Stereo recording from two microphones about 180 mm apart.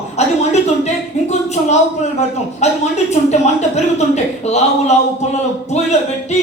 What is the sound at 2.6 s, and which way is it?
Speech, 40° left (ahead or behind).